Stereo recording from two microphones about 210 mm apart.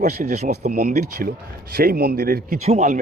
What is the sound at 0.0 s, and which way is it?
Speech, 35° right (ahead or behind).